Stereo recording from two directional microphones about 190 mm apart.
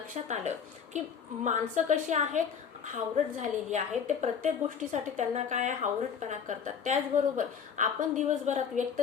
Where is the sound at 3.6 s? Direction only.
40° right (ahead or behind).